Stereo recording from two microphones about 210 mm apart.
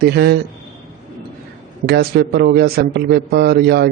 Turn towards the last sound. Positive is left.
turn(degrees=-50)  # may be behind; listen again after turning